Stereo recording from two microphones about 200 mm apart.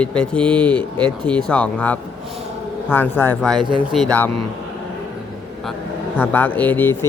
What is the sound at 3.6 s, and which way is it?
Speech, 25° right (ahead or behind).